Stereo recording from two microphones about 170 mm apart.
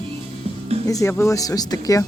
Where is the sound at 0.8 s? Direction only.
20° left (ahead or behind).